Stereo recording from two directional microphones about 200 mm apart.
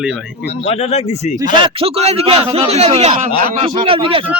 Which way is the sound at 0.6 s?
30° left (ahead or behind).